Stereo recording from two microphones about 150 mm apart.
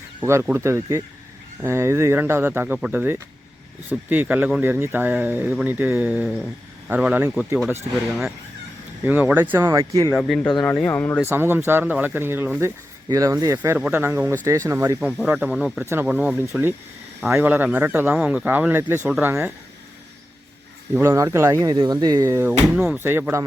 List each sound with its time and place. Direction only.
0.2 s speech: 15° right (ahead or behind)
9.0 s speech: 10° right (ahead or behind)
10.2 s speech: centre (ahead or behind)
11.2 s speech: 15° right (ahead or behind)
13.6 s speech: 10° right (ahead or behind)
20.9 s speech: 15° right (ahead or behind)